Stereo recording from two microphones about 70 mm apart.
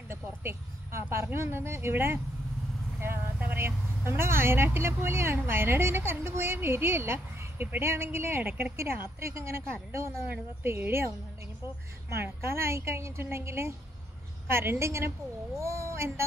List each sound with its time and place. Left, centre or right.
0.1 s vehicle: right
1.1 s speech: right
12.1 s speech: right